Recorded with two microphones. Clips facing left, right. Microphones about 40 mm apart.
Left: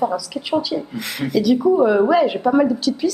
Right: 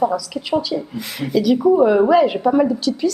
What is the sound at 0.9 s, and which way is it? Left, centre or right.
Speech, left.